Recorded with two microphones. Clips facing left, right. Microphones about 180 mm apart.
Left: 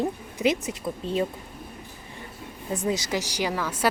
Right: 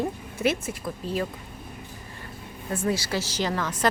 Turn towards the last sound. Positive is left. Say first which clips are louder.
# even
turn(degrees=10)  # may be behind; listen again after turning